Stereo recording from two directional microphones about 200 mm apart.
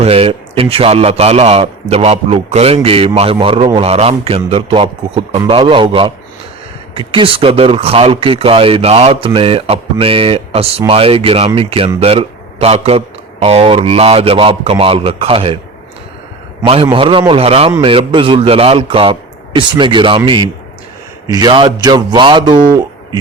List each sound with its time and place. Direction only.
0.0 s a man's voice: 30° right (ahead or behind)
16.6 s speech: 25° right (ahead or behind)